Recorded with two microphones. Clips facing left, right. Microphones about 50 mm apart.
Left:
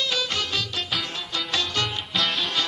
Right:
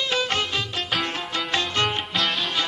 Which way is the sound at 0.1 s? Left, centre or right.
Right.